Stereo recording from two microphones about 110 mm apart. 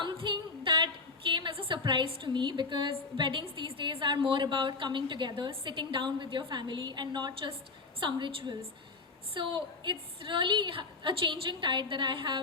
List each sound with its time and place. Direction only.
0.0 s female singing: 50° right (ahead or behind)
1.3 s a woman's voice: 50° right (ahead or behind)